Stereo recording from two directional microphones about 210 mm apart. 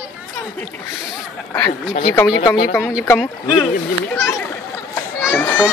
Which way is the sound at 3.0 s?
10° left (ahead or behind).